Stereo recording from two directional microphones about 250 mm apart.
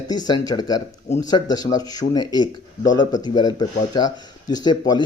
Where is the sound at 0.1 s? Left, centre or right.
Centre.